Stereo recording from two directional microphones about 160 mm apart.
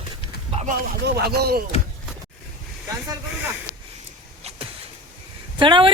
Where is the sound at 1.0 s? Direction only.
85° right.